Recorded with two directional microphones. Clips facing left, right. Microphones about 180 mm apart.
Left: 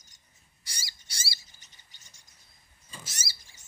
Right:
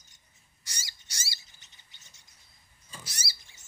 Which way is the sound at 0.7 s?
30° left (ahead or behind).